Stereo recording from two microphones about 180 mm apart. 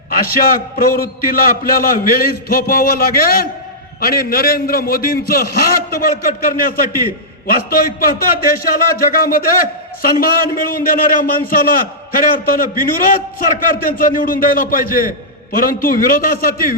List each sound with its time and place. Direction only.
0.1 s a man's voice: 55° left (ahead or behind)